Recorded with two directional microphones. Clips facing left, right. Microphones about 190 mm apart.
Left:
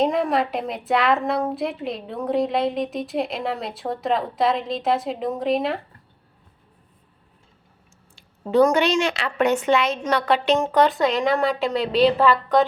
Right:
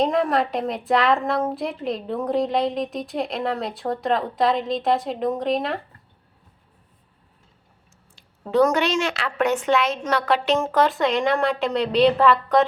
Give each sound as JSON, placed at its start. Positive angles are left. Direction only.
{"t": 0.0, "sound": "a woman's voice", "side_deg": 0}
{"t": 8.1, "sound": "a woman's voice", "side_deg": 0}